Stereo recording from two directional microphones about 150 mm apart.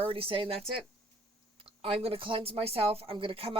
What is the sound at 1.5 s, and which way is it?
Speech, 40° right (ahead or behind).